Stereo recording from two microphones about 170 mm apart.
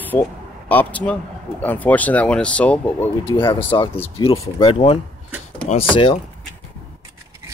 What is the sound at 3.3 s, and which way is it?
Speech, 30° left (ahead or behind).